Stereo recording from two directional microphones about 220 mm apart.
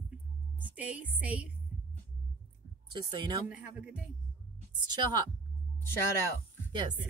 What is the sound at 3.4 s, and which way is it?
Music, 5° right (ahead or behind).